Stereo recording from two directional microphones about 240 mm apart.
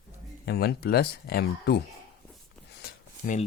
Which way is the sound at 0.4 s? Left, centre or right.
Left.